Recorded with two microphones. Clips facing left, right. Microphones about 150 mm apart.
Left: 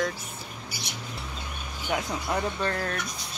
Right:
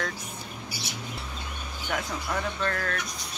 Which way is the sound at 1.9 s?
20° left (ahead or behind).